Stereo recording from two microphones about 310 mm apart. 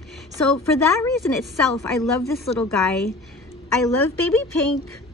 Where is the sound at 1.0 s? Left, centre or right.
Centre.